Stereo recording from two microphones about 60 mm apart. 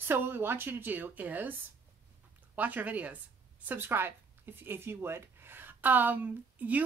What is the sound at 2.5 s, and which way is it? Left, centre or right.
Speech, right.